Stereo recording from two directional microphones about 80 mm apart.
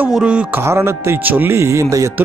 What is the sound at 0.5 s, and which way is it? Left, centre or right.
Speech, right.